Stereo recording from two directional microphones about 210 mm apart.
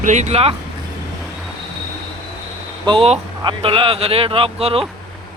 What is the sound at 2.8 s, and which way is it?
Speech, 25° right (ahead or behind).